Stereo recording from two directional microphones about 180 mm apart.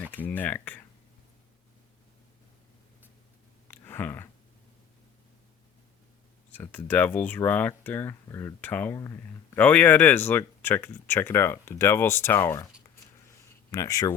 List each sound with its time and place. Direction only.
0.3 s speech: 10° left (ahead or behind)
3.7 s a sound: 10° left (ahead or behind)
6.5 s speech: 10° left (ahead or behind)
13.7 s speech: 20° left (ahead or behind)